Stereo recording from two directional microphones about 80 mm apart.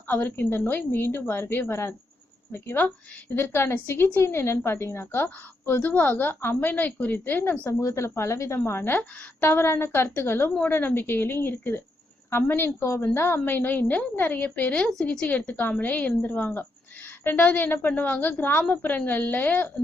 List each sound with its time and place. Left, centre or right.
0.1 s a woman's voice: left
7.8 s a woman's voice: left
14.8 s a woman's voice: centre